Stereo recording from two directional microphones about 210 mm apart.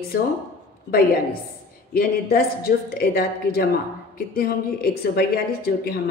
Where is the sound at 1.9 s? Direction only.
45° left (ahead or behind).